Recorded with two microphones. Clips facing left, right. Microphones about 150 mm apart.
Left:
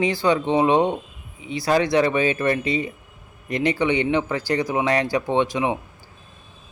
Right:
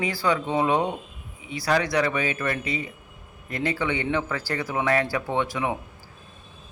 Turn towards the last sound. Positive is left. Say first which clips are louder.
# left 5 dB
turn(degrees=20)  # may be behind; listen again after turning